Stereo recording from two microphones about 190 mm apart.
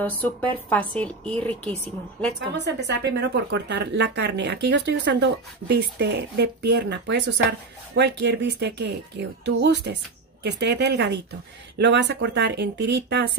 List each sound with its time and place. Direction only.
0.0 s a woman's voice: 10° left (ahead or behind)
2.3 s speech: 65° right (ahead or behind)